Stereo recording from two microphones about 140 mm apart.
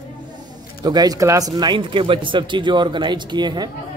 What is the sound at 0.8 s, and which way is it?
Speech, 30° right (ahead or behind).